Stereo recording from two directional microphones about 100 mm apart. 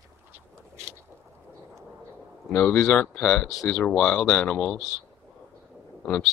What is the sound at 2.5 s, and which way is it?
Speech, 10° left (ahead or behind).